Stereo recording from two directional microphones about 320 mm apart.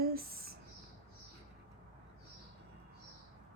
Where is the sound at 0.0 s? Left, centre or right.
Right.